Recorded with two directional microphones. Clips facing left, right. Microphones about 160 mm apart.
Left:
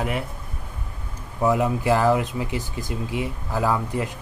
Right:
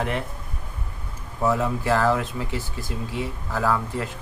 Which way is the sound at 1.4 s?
15° left (ahead or behind).